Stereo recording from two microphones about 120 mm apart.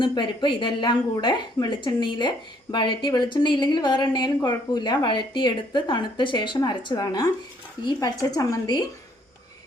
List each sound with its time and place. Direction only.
0.0 s a woman's voice: 40° left (ahead or behind)